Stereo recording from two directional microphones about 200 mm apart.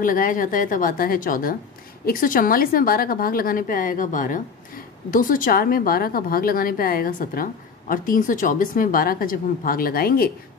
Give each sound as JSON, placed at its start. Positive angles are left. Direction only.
{"t": 0.0, "sound": "a woman's voice", "side_deg": 45}